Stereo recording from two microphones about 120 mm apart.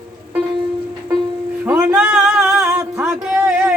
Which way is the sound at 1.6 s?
10° right (ahead or behind).